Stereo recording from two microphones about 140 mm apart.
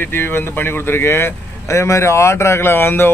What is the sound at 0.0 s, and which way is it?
Speech, 15° left (ahead or behind).